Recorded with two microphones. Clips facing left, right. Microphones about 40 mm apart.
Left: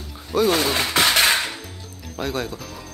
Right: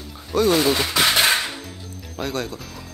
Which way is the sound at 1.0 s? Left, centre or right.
Centre.